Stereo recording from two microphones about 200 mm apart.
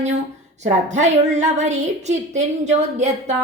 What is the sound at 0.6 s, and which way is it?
A woman's voice, 35° right (ahead or behind).